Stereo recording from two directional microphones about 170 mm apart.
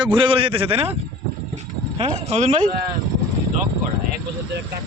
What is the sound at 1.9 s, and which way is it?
Speech, 35° right (ahead or behind).